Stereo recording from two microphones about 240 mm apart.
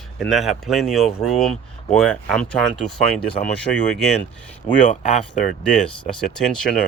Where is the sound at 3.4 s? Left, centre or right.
Centre.